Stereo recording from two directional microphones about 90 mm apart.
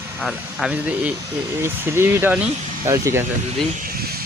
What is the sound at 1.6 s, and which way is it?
Speech, 25° right (ahead or behind).